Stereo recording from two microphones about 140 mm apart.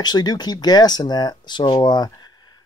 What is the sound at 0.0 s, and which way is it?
Speech, 30° left (ahead or behind).